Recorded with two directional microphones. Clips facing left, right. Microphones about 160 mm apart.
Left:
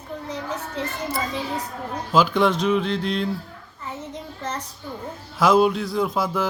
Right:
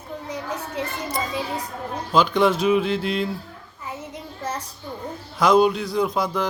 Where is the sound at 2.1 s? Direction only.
5° left (ahead or behind).